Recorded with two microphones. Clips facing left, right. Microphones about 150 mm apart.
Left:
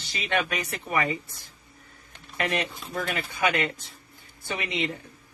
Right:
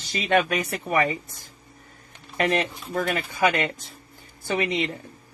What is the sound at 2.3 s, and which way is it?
Speech, 45° right (ahead or behind).